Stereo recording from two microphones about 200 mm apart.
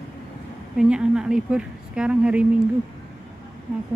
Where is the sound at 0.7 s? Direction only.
5° right (ahead or behind).